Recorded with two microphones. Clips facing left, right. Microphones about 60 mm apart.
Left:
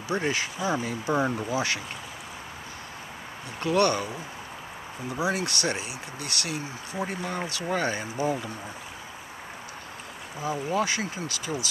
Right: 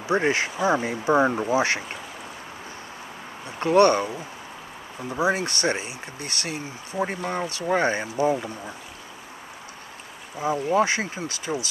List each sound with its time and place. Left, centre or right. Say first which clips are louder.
0.1 s speech: right 5 dB; right
3.5 s speech: right 6 dB; right
5.2 s speech: right 4 dB; right
10.7 s speech: right 6 dB; right